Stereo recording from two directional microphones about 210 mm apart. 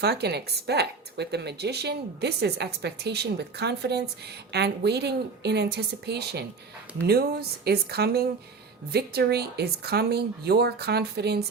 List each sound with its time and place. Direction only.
0.0 s speech: 50° right (ahead or behind)